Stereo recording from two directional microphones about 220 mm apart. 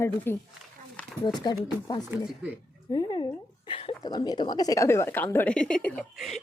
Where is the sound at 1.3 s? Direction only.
20° left (ahead or behind).